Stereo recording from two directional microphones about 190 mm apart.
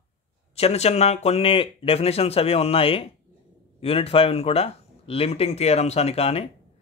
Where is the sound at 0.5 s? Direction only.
35° left (ahead or behind).